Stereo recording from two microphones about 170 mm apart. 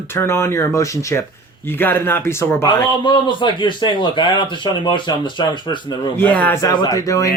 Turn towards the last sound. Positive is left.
turn(degrees=20)  # may be behind; listen again after turning